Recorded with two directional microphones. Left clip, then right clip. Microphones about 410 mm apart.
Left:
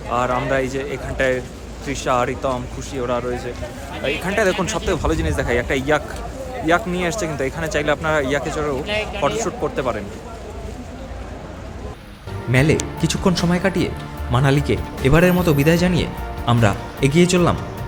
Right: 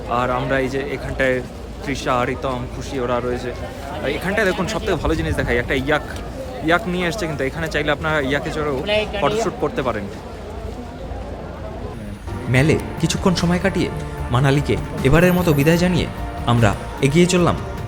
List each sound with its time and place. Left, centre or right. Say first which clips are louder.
0.1 s speech: even; centre
8.9 s speech: right 3 dB; right
9.2 s speech: right 1 dB; centre
12.5 s speech: even; centre